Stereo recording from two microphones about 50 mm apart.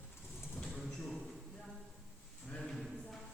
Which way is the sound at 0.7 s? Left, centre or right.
Centre.